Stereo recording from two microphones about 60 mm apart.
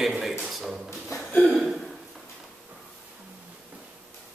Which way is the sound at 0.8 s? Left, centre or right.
Left.